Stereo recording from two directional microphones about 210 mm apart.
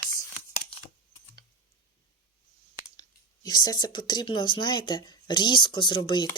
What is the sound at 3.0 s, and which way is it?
Speech, 20° left (ahead or behind).